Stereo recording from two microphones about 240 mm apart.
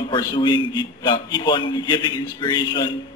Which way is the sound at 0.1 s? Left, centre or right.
Centre.